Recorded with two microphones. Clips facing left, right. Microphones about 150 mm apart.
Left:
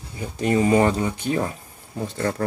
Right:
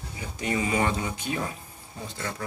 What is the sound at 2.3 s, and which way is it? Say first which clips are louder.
Speech: left 9 dB; 50° left (ahead or behind).